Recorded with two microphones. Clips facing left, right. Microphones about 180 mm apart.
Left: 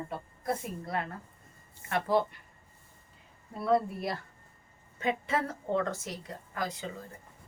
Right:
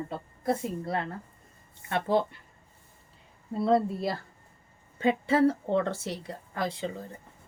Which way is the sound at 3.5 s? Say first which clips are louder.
Right 3 dB; 25° right (ahead or behind).